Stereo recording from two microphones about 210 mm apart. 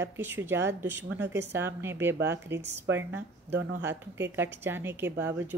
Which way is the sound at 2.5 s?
60° right (ahead or behind).